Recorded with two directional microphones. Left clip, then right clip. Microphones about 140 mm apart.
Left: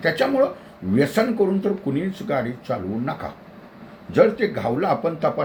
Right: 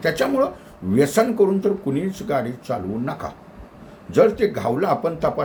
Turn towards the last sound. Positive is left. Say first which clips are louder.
# right 1 dB
turn(degrees=-20)  # may be behind; listen again after turning